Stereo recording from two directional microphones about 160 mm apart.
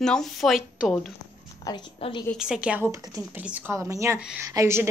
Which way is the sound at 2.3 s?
5° right (ahead or behind).